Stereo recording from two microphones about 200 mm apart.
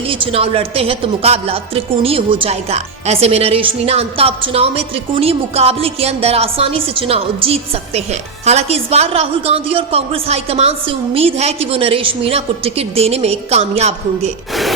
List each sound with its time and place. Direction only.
0.0 s a woman's voice: 25° right (ahead or behind)